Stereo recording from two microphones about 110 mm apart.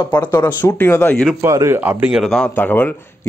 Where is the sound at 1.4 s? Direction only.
25° right (ahead or behind).